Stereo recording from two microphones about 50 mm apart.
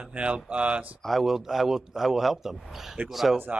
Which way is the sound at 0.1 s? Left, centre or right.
Right.